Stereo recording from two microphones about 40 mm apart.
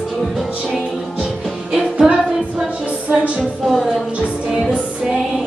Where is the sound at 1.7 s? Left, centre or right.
Centre.